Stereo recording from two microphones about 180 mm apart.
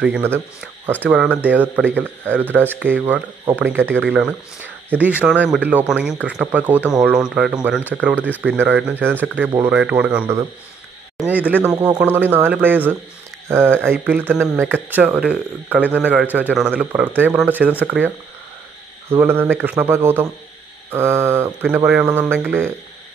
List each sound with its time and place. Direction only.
0.0 s speech: 10° right (ahead or behind)
11.7 s speech: 20° right (ahead or behind)